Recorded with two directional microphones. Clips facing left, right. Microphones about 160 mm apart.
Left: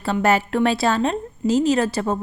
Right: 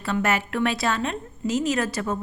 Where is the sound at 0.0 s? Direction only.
30° left (ahead or behind).